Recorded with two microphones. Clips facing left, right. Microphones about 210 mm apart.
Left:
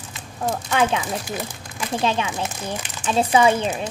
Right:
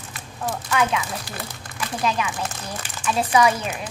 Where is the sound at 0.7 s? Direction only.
30° left (ahead or behind).